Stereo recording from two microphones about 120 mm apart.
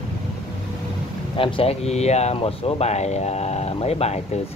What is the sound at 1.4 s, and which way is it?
Speech, 50° left (ahead or behind).